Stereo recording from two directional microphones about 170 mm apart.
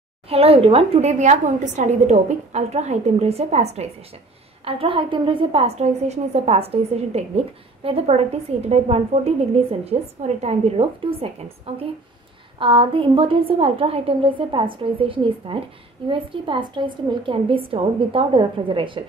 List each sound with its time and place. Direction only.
0.3 s a woman's voice: 35° right (ahead or behind)